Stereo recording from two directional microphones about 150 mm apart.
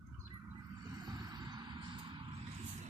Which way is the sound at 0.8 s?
25° right (ahead or behind).